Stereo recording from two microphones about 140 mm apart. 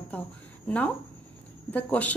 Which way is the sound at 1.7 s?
10° left (ahead or behind).